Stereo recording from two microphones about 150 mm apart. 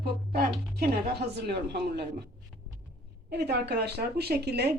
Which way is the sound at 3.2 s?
90° right.